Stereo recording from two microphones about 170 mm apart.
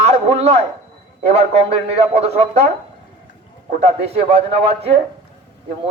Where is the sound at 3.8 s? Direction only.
35° right (ahead or behind).